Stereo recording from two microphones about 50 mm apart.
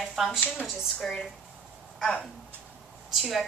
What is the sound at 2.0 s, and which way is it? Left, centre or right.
Speech, centre.